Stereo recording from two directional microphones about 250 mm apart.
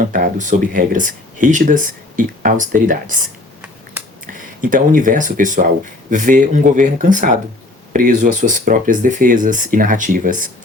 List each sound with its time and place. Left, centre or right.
0.0 s speech: right
4.7 s speech: right